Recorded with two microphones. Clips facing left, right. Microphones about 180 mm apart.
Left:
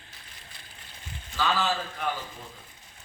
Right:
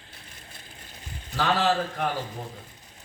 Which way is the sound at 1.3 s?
65° right (ahead or behind).